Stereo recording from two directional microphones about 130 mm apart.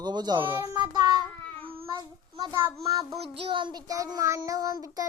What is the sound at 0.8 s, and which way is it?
Speech, 30° right (ahead or behind).